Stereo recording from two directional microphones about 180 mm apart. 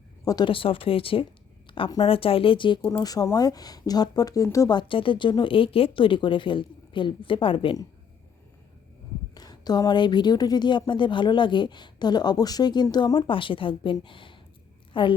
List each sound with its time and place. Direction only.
0.3 s a woman's voice: 25° left (ahead or behind)
9.3 s a woman's voice: 20° left (ahead or behind)